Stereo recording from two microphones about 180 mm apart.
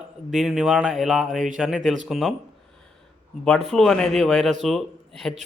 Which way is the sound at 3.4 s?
Centre (ahead or behind).